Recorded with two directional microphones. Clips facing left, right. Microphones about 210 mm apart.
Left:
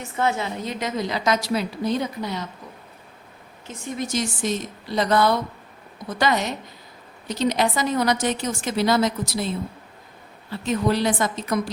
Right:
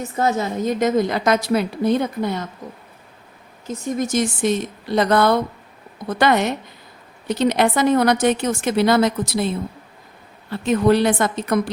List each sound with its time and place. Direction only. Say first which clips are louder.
0.2 s a woman's voice: right 4 dB; 40° right (ahead or behind)
3.7 s a woman's voice: right 6 dB; 45° right (ahead or behind)
10.5 s a woman's voice: right 6 dB; 60° right (ahead or behind)